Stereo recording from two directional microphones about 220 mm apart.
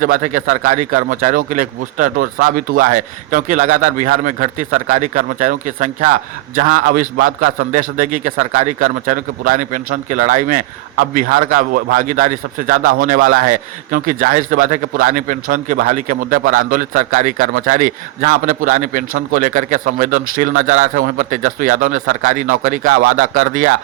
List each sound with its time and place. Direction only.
0.0 s a man's voice: 40° right (ahead or behind)